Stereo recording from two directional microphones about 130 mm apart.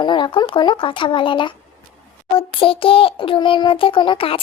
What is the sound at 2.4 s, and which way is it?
Child singing, 45° left (ahead or behind).